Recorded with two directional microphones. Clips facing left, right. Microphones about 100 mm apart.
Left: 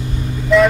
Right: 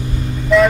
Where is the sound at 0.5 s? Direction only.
Centre (ahead or behind).